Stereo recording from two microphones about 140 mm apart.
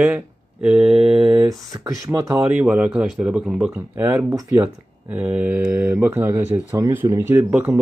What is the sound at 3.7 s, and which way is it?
Speech, 15° right (ahead or behind).